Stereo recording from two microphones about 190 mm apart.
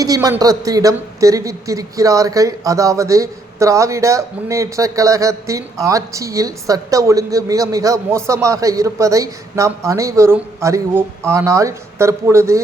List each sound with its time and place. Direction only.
0.0 s speech: 20° right (ahead or behind)